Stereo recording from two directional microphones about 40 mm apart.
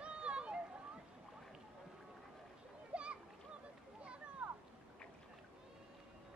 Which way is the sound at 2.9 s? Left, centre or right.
Right.